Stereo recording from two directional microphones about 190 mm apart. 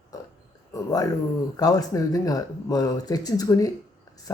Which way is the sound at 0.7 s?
20° left (ahead or behind).